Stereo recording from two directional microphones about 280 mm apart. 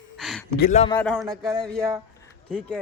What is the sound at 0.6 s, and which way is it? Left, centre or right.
Speech, left.